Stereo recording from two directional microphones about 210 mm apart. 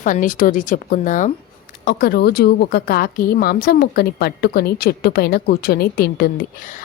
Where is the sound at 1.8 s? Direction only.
50° left (ahead or behind).